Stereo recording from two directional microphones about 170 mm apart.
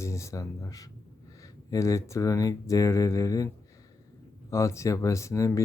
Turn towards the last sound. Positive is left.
turn(degrees=20)  # may be behind; listen again after turning